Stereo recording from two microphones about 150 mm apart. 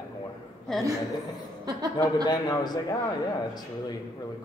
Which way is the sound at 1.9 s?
25° left (ahead or behind).